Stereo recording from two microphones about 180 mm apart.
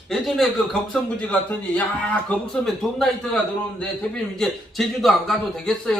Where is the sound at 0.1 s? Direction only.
Centre (ahead or behind).